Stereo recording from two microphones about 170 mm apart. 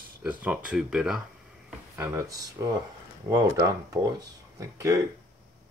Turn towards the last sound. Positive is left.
turn(degrees=-20)  # may be behind; listen again after turning